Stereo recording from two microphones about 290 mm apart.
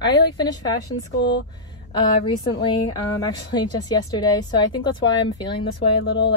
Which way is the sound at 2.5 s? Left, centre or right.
Centre.